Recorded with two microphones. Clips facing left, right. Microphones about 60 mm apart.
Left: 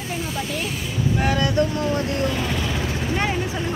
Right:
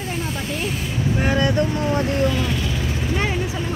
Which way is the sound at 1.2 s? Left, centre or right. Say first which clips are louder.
Right 2 dB; centre.